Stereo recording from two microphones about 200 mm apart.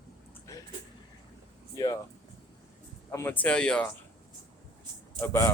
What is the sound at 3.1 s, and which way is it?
Speech, 10° left (ahead or behind).